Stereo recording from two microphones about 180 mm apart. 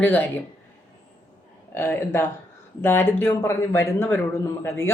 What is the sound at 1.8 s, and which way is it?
Speech, 10° left (ahead or behind).